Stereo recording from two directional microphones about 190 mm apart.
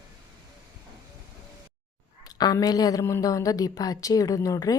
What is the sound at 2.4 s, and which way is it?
A woman's voice, 20° left (ahead or behind).